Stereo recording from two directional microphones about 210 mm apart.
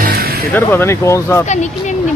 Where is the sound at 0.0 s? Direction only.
45° right (ahead or behind).